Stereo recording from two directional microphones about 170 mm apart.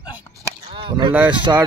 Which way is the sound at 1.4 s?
25° right (ahead or behind).